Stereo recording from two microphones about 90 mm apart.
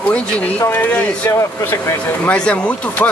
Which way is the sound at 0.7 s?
20° left (ahead or behind).